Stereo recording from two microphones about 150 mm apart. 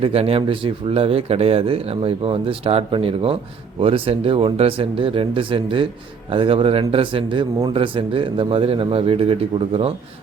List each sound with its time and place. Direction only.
0.0 s a man's voice: 40° right (ahead or behind)